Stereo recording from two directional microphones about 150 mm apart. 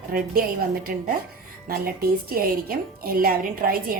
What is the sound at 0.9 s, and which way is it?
Dishes, 70° right (ahead or behind).